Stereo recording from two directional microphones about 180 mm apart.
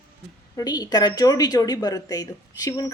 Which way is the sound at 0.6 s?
20° left (ahead or behind).